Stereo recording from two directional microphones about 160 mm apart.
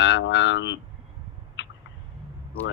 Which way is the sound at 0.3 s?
90° left.